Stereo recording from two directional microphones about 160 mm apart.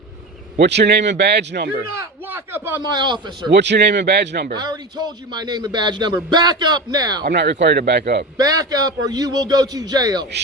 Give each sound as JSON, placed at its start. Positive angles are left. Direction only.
{"t": 0.6, "sound": "speech", "side_deg": -90}
{"t": 2.0, "sound": "a man's voice", "side_deg": -15}
{"t": 2.8, "sound": "a man's voice", "side_deg": -30}
{"t": 3.5, "sound": "speech", "side_deg": -90}
{"t": 4.5, "sound": "a man's voice", "side_deg": -25}
{"t": 7.3, "sound": "speech", "side_deg": -90}
{"t": 8.4, "sound": "a man's voice", "side_deg": -20}